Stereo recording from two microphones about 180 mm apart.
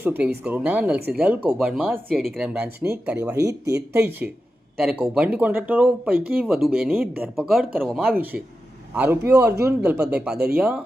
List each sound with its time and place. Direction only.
0.0 s a man's voice: 10° right (ahead or behind)
10.3 s speech: 60° right (ahead or behind)
10.6 s a man's voice: 5° right (ahead or behind)